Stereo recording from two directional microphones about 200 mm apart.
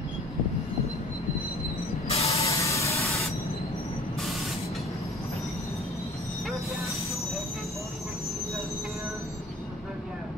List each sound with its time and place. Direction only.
2.0 s spray: 30° left (ahead or behind)
2.4 s spray: 15° left (ahead or behind)